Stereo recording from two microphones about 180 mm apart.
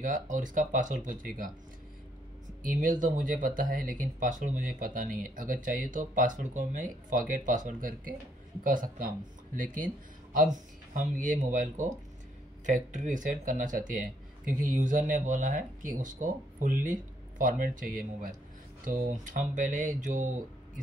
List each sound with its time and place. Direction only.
0.0 s speech: 45° right (ahead or behind)
2.6 s speech: 45° right (ahead or behind)
10.3 s speech: 50° right (ahead or behind)